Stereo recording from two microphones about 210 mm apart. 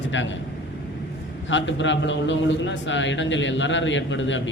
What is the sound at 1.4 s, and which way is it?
A man's voice, 60° left (ahead or behind).